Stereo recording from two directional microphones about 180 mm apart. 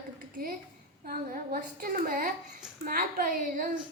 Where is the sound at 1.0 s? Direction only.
55° right (ahead or behind).